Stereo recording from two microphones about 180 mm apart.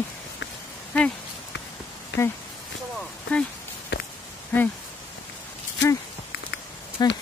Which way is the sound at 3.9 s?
70° left (ahead or behind).